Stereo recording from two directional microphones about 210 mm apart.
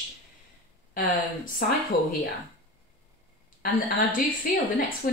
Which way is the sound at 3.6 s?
40° left (ahead or behind).